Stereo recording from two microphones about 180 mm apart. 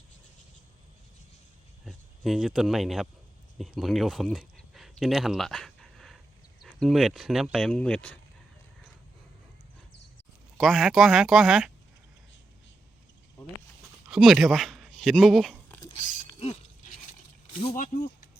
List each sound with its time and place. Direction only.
1.8 s speech: centre (ahead or behind)
10.6 s speech: centre (ahead or behind)
14.1 s speech: centre (ahead or behind)
15.9 s a sound: 35° left (ahead or behind)
17.7 s speech: 50° left (ahead or behind)